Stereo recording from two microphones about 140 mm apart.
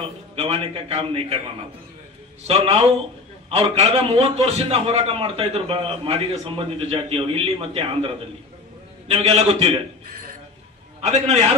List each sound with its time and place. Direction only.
0.4 s a man's voice: 40° right (ahead or behind)
2.4 s a man's voice: 45° right (ahead or behind)
3.9 s a man's voice: 40° right (ahead or behind)
11.0 s a man's voice: 50° right (ahead or behind)